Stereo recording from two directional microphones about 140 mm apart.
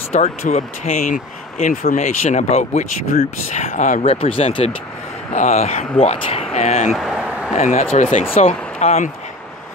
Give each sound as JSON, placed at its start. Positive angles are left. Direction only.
{"t": 0.1, "sound": "speech", "side_deg": 50}
{"t": 3.1, "sound": "speech", "side_deg": 75}
{"t": 3.6, "sound": "speech", "side_deg": 65}
{"t": 4.0, "sound": "speech", "side_deg": 40}
{"t": 5.9, "sound": "speech", "side_deg": 45}
{"t": 6.9, "sound": "a sound", "side_deg": -5}
{"t": 7.5, "sound": "speech", "side_deg": 50}